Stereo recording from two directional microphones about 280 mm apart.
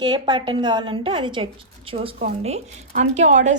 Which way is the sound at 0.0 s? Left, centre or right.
Centre.